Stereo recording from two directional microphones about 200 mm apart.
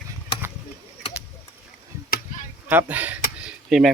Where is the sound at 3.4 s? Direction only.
5° right (ahead or behind).